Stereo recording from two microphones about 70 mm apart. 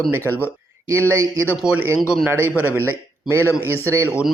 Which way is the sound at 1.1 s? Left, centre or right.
Right.